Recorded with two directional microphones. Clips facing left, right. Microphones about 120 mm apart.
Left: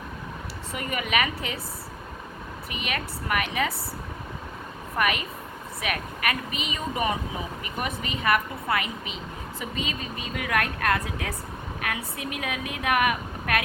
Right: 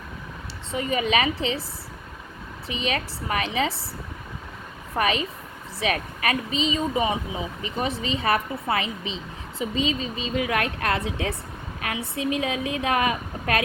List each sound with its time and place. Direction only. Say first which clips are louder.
0.7 s a woman's voice: right 5 dB; 25° right (ahead or behind)
2.6 s a woman's voice: right 5 dB; 30° right (ahead or behind)
4.9 s a woman's voice: right 2 dB; 30° right (ahead or behind)